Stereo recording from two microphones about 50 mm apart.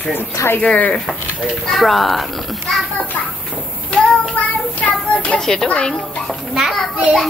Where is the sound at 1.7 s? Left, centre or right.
Centre.